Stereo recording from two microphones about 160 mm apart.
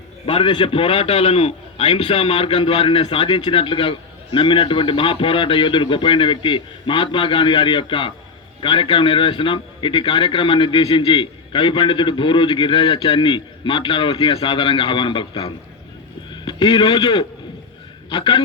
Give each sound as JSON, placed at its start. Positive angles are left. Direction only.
{"t": 0.3, "sound": "a man's voice", "side_deg": 35}